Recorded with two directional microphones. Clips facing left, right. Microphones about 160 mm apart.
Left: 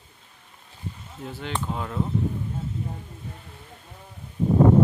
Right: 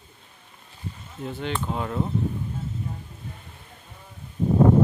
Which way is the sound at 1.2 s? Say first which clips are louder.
Right 2 dB; 5° left (ahead or behind).